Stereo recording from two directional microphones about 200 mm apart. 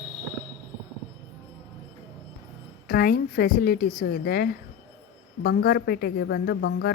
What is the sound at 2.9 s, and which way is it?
A woman's voice, 50° left (ahead or behind).